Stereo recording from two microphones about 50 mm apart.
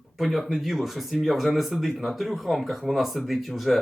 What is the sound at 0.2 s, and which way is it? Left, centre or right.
Speech, centre.